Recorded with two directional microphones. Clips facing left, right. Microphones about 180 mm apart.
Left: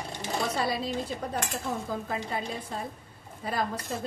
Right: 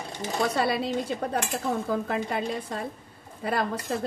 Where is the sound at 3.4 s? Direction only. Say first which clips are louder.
Right 3 dB; 65° right (ahead or behind).